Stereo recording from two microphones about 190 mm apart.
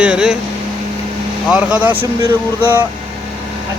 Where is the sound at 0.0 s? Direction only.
5° right (ahead or behind).